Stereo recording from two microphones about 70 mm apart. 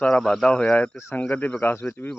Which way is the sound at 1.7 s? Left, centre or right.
Left.